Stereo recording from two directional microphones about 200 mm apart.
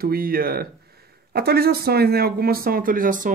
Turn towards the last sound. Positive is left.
turn(degrees=-40)  # may be behind; listen again after turning